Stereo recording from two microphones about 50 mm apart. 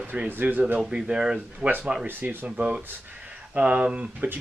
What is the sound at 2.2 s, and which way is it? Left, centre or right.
Speech, right.